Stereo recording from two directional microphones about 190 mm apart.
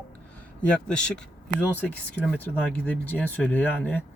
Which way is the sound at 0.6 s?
5° left (ahead or behind).